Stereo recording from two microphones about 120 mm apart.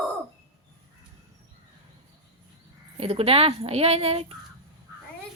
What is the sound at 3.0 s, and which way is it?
A woman's voice, 55° right (ahead or behind).